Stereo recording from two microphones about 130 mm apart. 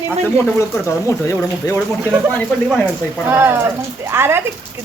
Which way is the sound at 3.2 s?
15° right (ahead or behind).